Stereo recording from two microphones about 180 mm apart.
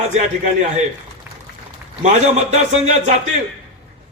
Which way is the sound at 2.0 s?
40° right (ahead or behind).